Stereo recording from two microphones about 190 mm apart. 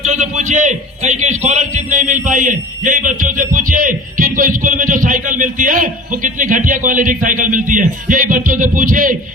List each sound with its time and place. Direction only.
0.0 s a man's voice: 40° right (ahead or behind)